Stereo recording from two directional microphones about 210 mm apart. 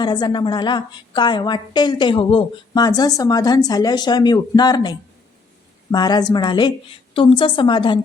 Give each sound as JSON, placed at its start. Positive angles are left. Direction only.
{"t": 0.0, "sound": "a woman's voice", "side_deg": 20}